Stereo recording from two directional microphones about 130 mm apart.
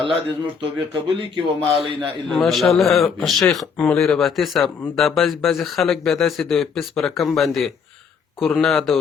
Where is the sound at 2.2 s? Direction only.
Centre (ahead or behind).